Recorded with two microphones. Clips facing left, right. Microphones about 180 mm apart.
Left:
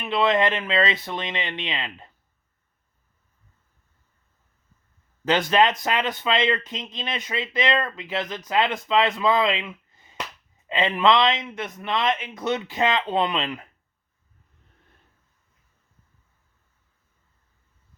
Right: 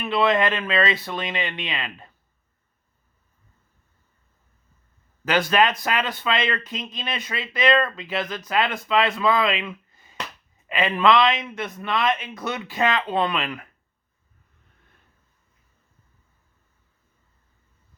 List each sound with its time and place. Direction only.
0.0 s speech: 20° left (ahead or behind)
5.2 s speech: 20° left (ahead or behind)